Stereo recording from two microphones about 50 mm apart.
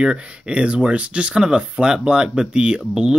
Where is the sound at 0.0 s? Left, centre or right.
Centre.